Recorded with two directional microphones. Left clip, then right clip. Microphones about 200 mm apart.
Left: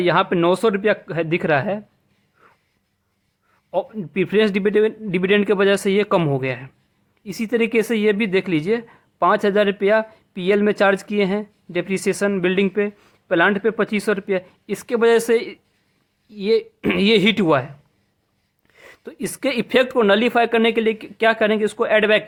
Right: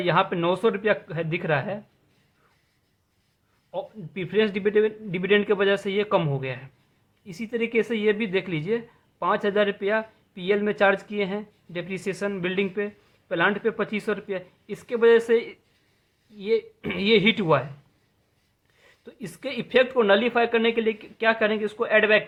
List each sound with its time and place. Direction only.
0.0 s a woman's voice: 55° left (ahead or behind)
2.4 s a sound: 55° left (ahead or behind)
3.7 s a woman's voice: 55° left (ahead or behind)
18.7 s speech: 55° left (ahead or behind)